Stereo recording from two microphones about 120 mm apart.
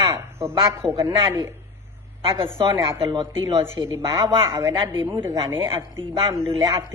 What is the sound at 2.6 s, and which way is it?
Speech, 30° right (ahead or behind).